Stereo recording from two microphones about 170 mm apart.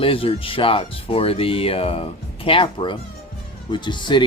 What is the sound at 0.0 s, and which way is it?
Speech, 35° left (ahead or behind).